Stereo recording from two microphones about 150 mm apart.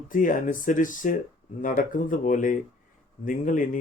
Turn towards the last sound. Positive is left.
turn(degrees=60)  # may be behind; listen again after turning